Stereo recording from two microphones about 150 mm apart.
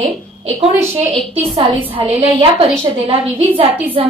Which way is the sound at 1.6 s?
35° right (ahead or behind).